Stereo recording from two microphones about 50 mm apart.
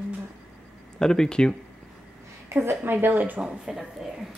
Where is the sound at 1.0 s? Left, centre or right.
Centre.